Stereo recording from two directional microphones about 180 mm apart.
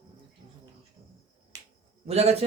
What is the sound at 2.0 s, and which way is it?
Speech, 35° right (ahead or behind).